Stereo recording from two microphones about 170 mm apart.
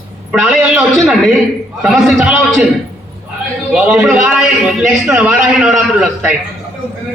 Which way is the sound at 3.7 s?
5° right (ahead or behind).